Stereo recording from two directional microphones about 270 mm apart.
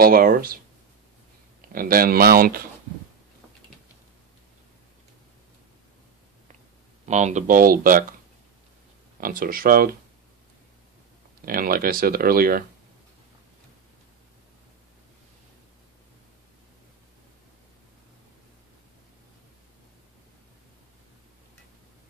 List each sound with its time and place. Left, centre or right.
0.0 s speech: right
1.7 s speech: right
7.1 s speech: right
9.2 s speech: right
11.4 s speech: right